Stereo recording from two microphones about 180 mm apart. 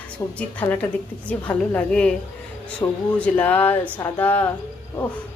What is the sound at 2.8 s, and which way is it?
Speech, 20° left (ahead or behind).